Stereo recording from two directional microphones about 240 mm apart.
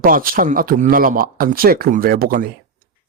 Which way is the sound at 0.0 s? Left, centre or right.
Right.